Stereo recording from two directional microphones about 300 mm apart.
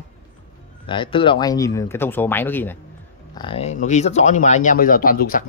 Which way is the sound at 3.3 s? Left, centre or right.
Centre.